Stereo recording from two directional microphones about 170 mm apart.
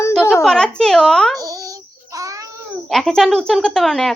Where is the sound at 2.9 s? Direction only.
5° left (ahead or behind).